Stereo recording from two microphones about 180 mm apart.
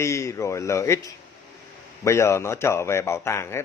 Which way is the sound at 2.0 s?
15° left (ahead or behind).